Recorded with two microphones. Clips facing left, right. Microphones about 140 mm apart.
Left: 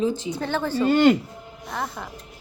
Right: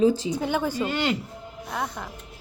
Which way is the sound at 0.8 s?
50° left (ahead or behind).